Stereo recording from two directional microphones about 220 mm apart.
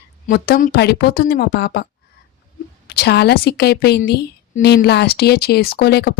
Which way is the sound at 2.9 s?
50° left (ahead or behind).